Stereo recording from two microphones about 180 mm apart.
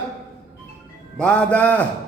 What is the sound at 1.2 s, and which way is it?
Speech, 5° left (ahead or behind).